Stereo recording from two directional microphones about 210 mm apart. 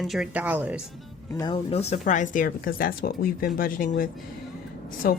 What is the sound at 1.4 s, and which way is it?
Speech, 25° left (ahead or behind).